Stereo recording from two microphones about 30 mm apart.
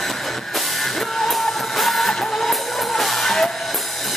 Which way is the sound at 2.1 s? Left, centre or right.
Centre.